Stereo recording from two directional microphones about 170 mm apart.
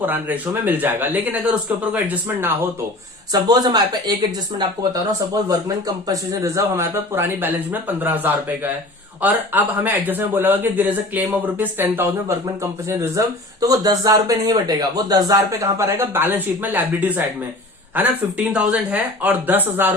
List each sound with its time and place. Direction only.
0.0 s a man's voice: 10° right (ahead or behind)
3.3 s speech: 25° right (ahead or behind)
5.3 s a man's voice: 20° right (ahead or behind)